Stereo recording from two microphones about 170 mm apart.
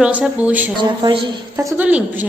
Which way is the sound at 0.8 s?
30° right (ahead or behind).